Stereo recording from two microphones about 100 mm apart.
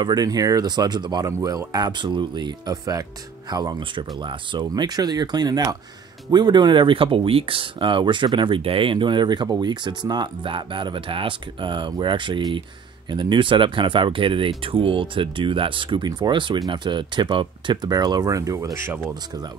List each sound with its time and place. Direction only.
0.0 s speech: 40° right (ahead or behind)
3.9 s speech: 55° right (ahead or behind)
17.8 s speech: 45° right (ahead or behind)